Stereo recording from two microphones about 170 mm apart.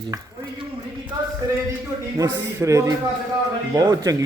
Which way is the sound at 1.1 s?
20° right (ahead or behind).